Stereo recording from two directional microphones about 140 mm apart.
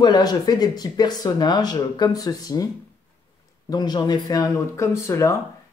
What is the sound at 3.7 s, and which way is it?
Speech, 30° left (ahead or behind).